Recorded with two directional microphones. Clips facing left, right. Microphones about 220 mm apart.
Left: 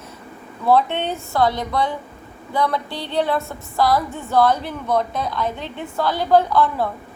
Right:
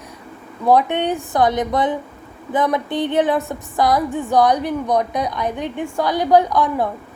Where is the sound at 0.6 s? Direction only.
15° right (ahead or behind).